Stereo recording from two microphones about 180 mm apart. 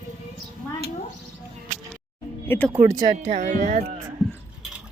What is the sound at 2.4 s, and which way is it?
Speech, 10° left (ahead or behind).